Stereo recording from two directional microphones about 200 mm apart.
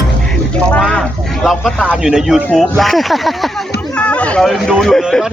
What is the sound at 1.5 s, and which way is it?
Speech, 5° left (ahead or behind).